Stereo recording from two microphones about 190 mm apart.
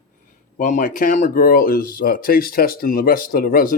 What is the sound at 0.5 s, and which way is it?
Speech, 45° left (ahead or behind).